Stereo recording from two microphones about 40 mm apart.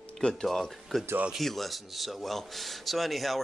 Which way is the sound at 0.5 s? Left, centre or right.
Centre.